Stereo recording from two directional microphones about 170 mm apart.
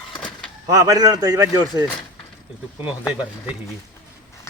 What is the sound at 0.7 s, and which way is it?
Speech, 20° right (ahead or behind).